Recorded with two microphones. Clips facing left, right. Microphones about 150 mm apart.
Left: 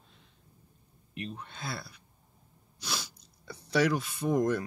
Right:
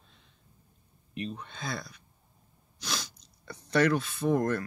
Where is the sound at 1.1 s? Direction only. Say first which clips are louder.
Right 3 dB; 5° left (ahead or behind).